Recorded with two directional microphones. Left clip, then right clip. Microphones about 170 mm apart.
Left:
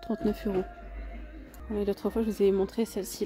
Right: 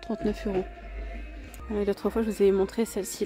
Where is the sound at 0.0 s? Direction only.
10° left (ahead or behind).